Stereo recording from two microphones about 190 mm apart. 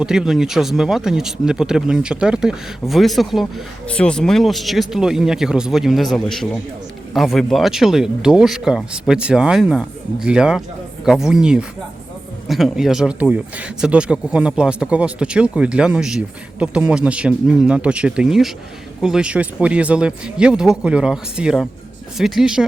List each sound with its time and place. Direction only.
0.0 s speech: 5° right (ahead or behind)